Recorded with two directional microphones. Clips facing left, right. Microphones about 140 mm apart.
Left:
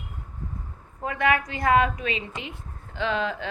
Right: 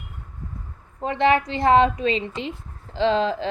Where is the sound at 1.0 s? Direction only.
30° right (ahead or behind).